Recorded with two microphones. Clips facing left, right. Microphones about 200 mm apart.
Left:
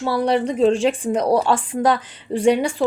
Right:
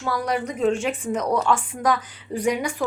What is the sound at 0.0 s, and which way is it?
Speech, 30° left (ahead or behind).